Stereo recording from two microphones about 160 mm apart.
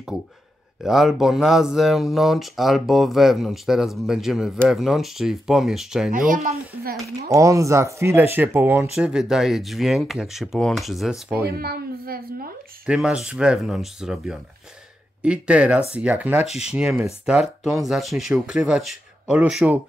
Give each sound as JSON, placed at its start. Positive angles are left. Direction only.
{"t": 0.8, "sound": "speech", "side_deg": 0}
{"t": 6.3, "sound": "a woman's voice", "side_deg": -70}
{"t": 7.3, "sound": "speech", "side_deg": -20}
{"t": 11.5, "sound": "a woman's voice", "side_deg": -70}
{"t": 12.8, "sound": "speech", "side_deg": -5}
{"t": 16.3, "sound": "speech", "side_deg": 40}
{"t": 16.7, "sound": "speech", "side_deg": -10}